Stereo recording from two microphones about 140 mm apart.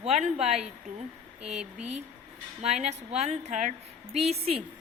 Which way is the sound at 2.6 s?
50° right (ahead or behind).